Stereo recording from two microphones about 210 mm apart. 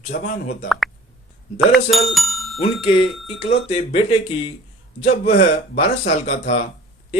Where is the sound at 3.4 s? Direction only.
30° left (ahead or behind).